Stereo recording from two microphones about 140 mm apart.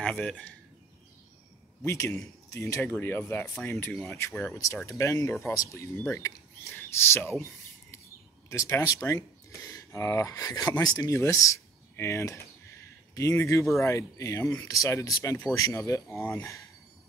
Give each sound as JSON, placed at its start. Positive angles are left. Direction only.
{"t": 0.0, "sound": "speech", "side_deg": 10}
{"t": 1.9, "sound": "speech", "side_deg": 20}
{"t": 8.5, "sound": "speech", "side_deg": 20}
{"t": 16.2, "sound": "speech", "side_deg": 10}